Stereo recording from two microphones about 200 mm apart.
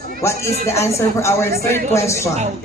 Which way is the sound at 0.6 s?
15° left (ahead or behind).